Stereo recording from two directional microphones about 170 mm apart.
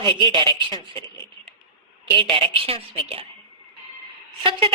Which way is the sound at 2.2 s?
30° right (ahead or behind).